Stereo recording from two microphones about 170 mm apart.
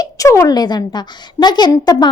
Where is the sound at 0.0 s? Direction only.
20° left (ahead or behind).